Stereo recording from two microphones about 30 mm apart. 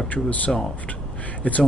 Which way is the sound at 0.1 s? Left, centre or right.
Left.